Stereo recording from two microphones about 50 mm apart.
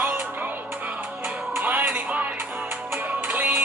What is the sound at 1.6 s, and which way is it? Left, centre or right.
Music, right.